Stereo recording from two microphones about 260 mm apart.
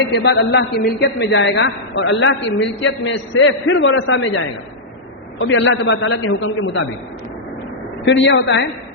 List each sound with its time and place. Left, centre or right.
0.2 s a man's voice: left
8.0 s a man's voice: left